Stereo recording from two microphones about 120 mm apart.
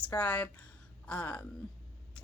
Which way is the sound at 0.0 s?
10° left (ahead or behind).